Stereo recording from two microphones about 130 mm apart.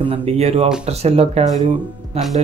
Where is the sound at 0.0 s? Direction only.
50° right (ahead or behind).